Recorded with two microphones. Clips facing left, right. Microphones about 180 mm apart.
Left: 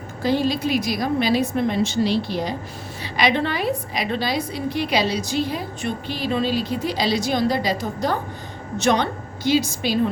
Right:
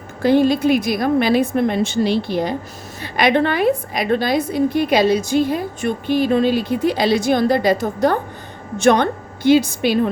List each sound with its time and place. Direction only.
0.2 s a woman's voice: 55° right (ahead or behind)